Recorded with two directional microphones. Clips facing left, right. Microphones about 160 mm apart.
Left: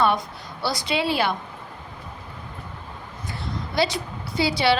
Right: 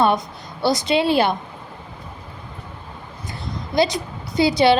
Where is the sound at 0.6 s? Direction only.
20° right (ahead or behind).